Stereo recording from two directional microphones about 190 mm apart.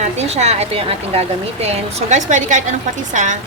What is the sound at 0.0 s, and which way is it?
Speech, 35° right (ahead or behind).